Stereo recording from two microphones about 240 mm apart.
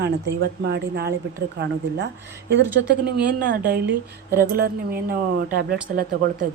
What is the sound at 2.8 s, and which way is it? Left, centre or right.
Speech, right.